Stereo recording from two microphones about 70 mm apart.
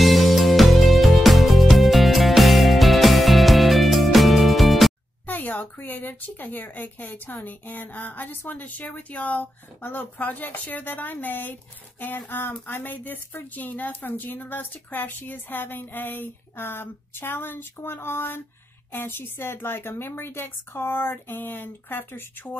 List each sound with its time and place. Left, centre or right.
0.0 s music: centre
5.2 s a woman's voice: left